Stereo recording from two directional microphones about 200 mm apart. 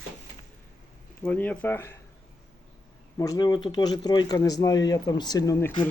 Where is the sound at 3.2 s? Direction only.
20° left (ahead or behind).